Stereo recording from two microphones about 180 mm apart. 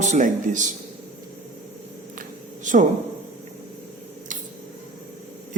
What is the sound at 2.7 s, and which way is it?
Speech, 45° right (ahead or behind).